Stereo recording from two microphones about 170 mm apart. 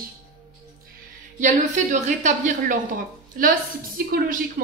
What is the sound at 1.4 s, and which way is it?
Speech, 45° right (ahead or behind).